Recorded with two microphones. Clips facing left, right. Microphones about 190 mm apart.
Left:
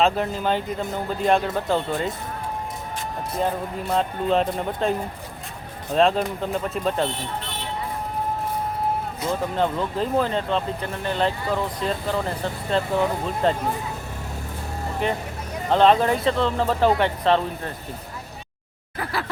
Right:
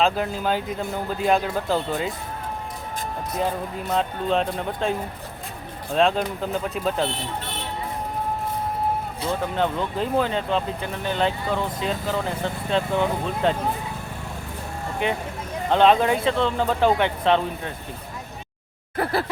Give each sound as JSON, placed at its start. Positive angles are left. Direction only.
{"t": 0.0, "sound": "speech", "side_deg": 0}
{"t": 3.8, "sound": "speech", "side_deg": 0}
{"t": 9.2, "sound": "speech", "side_deg": 5}
{"t": 15.7, "sound": "speech", "side_deg": 0}